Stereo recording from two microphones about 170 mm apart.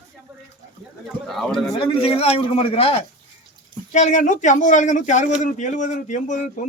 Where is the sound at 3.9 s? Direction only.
45° left (ahead or behind).